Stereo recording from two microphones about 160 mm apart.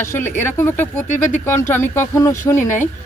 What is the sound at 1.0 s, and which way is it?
Speech, 50° left (ahead or behind).